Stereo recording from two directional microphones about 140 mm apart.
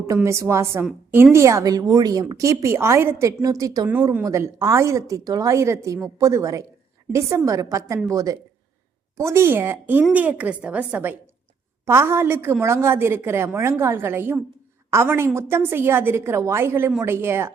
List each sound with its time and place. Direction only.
0.1 s a woman's voice: 20° right (ahead or behind)